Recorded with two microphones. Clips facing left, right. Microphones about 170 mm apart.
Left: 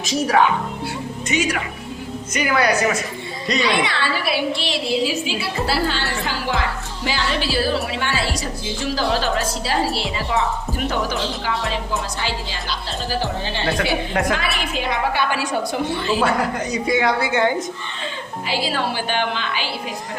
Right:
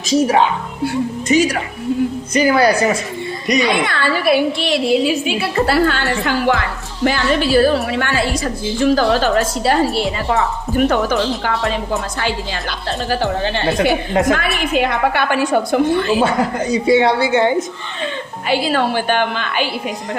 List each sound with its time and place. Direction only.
1.3 s a woman's voice: 35° right (ahead or behind)
3.6 s a woman's voice: 50° right (ahead or behind)
14.3 s a woman's voice: 50° right (ahead or behind)
16.2 s a woman's voice: 25° right (ahead or behind)
18.4 s a woman's voice: 55° right (ahead or behind)